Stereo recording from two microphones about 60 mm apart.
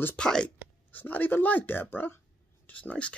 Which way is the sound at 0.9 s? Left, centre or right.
Left.